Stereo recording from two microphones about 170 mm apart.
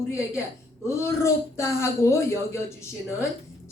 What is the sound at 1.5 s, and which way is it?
Speech, 15° left (ahead or behind).